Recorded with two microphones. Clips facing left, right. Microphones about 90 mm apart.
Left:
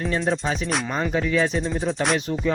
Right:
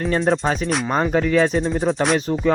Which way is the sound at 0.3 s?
40° right (ahead or behind).